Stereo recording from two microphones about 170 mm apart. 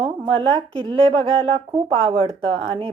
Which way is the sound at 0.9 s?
35° right (ahead or behind).